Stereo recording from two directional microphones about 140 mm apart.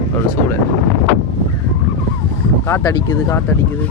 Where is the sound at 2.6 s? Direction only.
20° left (ahead or behind).